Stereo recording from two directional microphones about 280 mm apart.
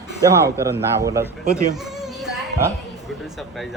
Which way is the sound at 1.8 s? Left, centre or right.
Centre.